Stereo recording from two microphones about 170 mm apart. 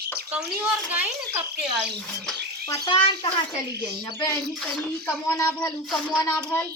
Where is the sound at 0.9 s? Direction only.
10° right (ahead or behind).